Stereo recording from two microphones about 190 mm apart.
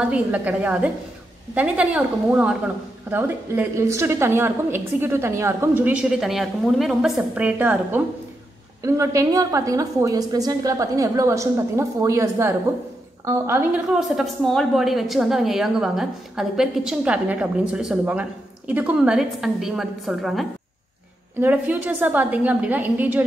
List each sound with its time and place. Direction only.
0.0 s a woman's voice: 5° right (ahead or behind)